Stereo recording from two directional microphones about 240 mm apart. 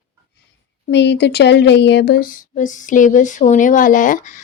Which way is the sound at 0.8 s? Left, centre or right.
Left.